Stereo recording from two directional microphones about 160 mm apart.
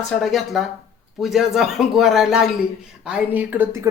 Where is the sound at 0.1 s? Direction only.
Centre (ahead or behind).